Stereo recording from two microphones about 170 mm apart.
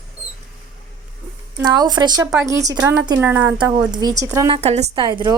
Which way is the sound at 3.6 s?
25° right (ahead or behind).